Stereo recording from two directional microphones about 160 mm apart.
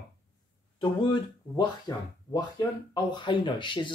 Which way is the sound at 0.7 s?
25° left (ahead or behind).